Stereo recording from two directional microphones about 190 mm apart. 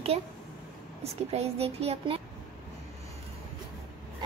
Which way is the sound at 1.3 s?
30° right (ahead or behind).